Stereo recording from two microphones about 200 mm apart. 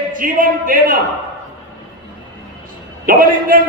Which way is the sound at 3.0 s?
45° right (ahead or behind).